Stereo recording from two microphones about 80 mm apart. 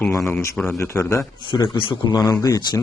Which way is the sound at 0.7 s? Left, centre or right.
Left.